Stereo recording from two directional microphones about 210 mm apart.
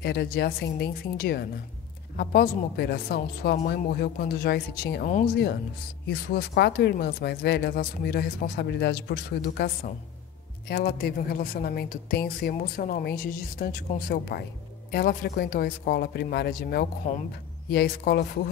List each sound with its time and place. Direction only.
0.0 s speech: 50° left (ahead or behind)
10.7 s speech: 50° left (ahead or behind)